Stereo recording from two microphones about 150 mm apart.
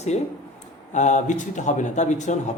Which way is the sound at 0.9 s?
50° left (ahead or behind).